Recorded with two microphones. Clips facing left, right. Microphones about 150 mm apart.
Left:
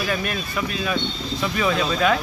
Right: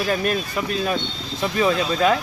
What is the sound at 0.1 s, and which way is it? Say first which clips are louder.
Speech: right 4 dB; 40° right (ahead or behind).